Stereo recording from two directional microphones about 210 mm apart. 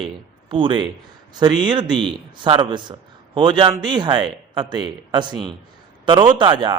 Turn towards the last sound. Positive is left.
turn(degrees=-20)  # may be behind; listen again after turning